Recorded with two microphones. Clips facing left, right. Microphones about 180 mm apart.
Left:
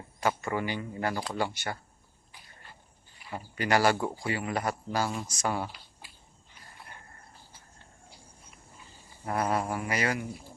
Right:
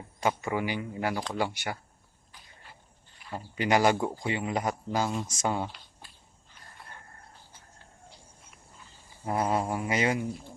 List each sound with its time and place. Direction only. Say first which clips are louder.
0.2 s speech: right 1 dB; 15° right (ahead or behind)
3.3 s speech: right 1 dB; 15° right (ahead or behind)
9.2 s speech: right 1 dB; 20° right (ahead or behind)